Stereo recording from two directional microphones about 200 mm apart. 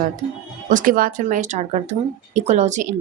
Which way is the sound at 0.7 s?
45° right (ahead or behind).